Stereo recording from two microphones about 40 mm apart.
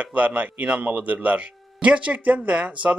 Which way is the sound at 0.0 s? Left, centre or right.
Right.